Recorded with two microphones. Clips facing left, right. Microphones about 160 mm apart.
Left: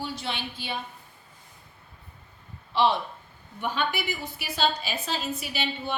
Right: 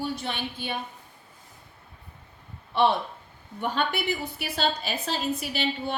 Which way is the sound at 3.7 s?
60° right (ahead or behind).